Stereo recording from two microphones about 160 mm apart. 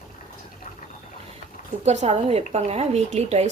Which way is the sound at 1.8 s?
45° right (ahead or behind).